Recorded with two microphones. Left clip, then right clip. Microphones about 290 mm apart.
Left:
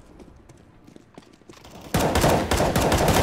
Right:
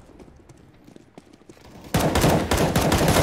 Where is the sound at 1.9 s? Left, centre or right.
Centre.